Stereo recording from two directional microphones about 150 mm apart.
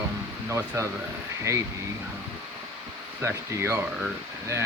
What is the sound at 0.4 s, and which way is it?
Speech, 20° right (ahead or behind).